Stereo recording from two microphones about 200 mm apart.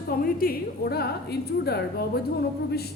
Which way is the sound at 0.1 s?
45° left (ahead or behind).